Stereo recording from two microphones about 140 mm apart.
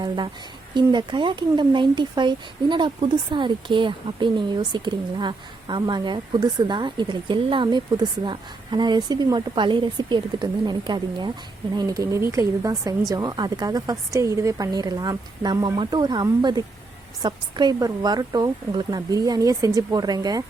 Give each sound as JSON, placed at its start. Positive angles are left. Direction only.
{"t": 0.7, "sound": "speech", "side_deg": -30}